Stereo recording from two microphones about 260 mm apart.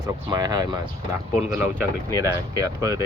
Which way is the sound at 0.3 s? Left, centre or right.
Centre.